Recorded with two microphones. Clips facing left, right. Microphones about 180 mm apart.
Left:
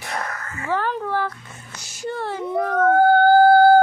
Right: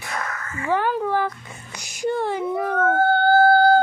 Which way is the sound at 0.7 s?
10° right (ahead or behind).